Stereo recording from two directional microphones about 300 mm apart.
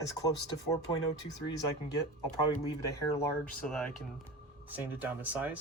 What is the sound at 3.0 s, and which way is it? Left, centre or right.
Speech, centre.